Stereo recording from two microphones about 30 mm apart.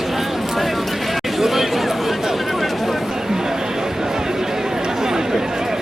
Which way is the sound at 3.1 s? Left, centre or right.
Centre.